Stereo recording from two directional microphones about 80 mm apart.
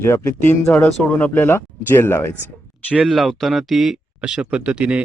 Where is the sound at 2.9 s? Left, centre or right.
Centre.